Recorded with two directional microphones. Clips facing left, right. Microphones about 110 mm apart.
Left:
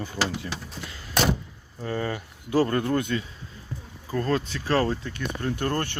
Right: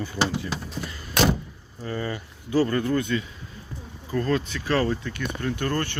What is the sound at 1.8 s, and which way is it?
Speech, 65° left (ahead or behind).